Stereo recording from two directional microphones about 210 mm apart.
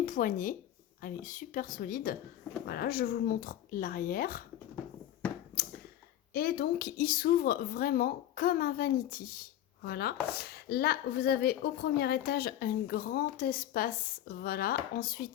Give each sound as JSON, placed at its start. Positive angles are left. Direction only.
{"t": 0.0, "sound": "speech", "side_deg": 40}
{"t": 6.3, "sound": "speech", "side_deg": 45}